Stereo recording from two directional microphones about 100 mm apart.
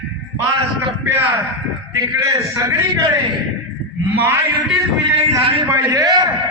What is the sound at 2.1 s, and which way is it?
A man's voice, 30° right (ahead or behind).